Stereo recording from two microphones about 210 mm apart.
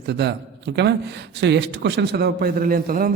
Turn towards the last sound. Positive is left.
turn(degrees=-45)  # may be behind; listen again after turning